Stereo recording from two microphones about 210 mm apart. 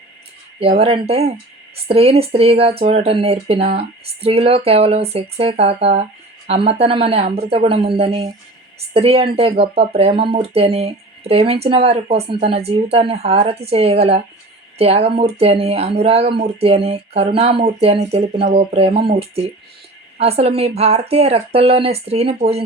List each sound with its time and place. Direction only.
0.6 s speech: 30° right (ahead or behind)